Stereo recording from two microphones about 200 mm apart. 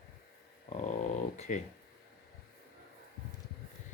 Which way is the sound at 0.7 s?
35° left (ahead or behind).